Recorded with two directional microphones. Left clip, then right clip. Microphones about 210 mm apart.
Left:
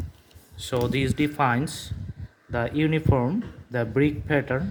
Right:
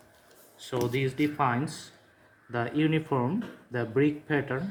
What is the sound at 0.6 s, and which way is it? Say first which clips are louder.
Speech: left 4 dB; 40° left (ahead or behind).